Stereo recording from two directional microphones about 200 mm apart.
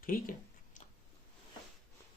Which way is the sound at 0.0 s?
45° left (ahead or behind).